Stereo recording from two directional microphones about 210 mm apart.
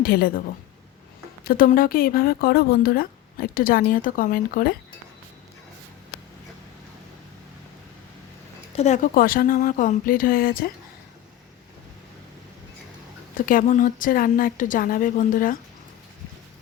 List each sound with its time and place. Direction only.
0.0 s speech: 45° left (ahead or behind)
1.5 s speech: 45° left (ahead or behind)
8.7 s a woman's voice: 30° left (ahead or behind)
13.3 s a woman's voice: 40° left (ahead or behind)